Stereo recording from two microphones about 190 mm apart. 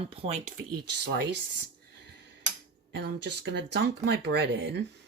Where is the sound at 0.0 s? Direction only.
30° right (ahead or behind).